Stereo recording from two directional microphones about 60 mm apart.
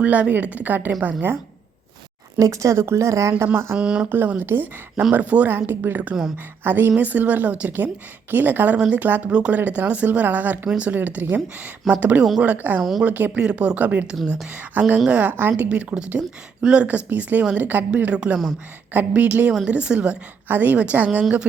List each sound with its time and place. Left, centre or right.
0.0 s a woman's voice: right
2.4 s speech: right
2.8 s speech: right
3.8 s speech: centre
4.0 s a woman's voice: right
5.5 s a woman's voice: right
9.3 s a woman's voice: centre
13.4 s a woman's voice: centre; by 15.7 s right
15.7 s a woman's voice: centre
20.5 s a woman's voice: right